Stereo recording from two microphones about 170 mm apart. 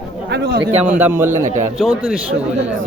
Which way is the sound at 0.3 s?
70° right (ahead or behind).